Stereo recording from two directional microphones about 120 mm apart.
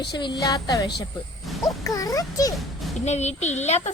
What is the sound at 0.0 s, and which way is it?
A child's voice, 40° left (ahead or behind).